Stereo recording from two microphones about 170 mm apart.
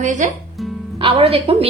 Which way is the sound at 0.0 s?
45° right (ahead or behind).